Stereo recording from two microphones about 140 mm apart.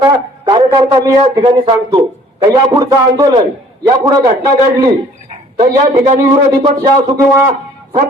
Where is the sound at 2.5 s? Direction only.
30° right (ahead or behind).